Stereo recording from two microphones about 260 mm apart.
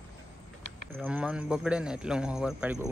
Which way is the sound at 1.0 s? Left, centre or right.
Centre.